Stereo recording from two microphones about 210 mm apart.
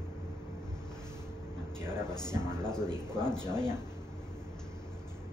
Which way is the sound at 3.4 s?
20° left (ahead or behind).